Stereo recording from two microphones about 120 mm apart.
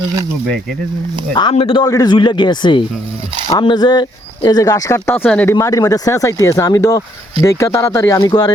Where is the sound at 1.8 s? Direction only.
35° left (ahead or behind).